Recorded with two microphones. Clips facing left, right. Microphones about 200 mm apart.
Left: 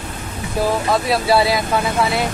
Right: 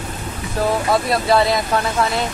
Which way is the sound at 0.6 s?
10° left (ahead or behind).